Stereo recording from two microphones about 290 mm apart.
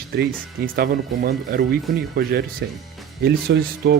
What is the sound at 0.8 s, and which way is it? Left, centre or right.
Speech, right.